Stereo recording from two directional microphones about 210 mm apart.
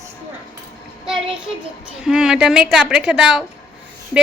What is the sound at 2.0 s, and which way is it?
Speech, 5° right (ahead or behind).